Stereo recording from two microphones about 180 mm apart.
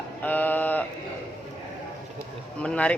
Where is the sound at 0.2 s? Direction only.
10° left (ahead or behind).